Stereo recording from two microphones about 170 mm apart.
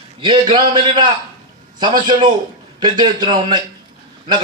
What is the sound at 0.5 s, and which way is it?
A man's voice, 25° right (ahead or behind).